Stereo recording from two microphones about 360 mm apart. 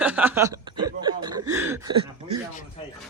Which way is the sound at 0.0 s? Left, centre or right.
Centre.